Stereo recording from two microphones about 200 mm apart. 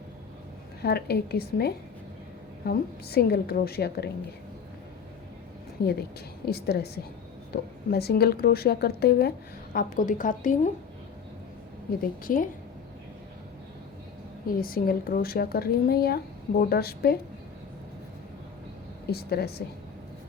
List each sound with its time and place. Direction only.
0.8 s a woman's voice: 55° left (ahead or behind)
5.8 s a woman's voice: 50° left (ahead or behind)
9.7 s a woman's voice: 40° left (ahead or behind)
11.9 s a woman's voice: 45° left (ahead or behind)
14.6 s a woman's voice: 45° left (ahead or behind)
19.1 s a woman's voice: 55° left (ahead or behind)